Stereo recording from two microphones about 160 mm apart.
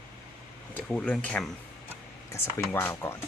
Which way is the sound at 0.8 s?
10° left (ahead or behind).